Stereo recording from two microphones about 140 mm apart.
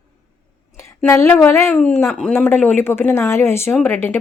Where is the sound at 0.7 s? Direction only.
20° left (ahead or behind).